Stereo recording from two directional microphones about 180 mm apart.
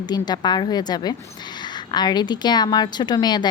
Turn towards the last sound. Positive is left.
turn(degrees=25)  # may be behind; listen again after turning